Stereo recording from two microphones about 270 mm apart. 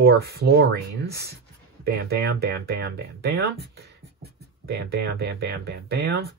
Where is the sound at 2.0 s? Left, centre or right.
Right.